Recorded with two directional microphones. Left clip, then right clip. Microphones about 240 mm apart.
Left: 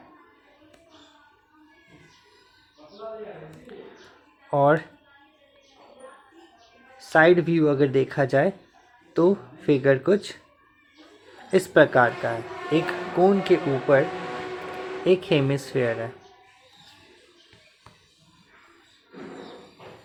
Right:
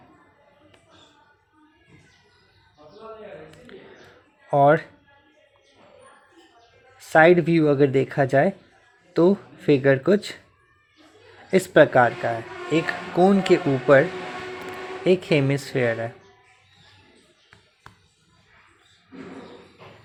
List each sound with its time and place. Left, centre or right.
4.5 s speech: centre
7.1 s speech: centre
11.5 s speech: centre
15.0 s speech: right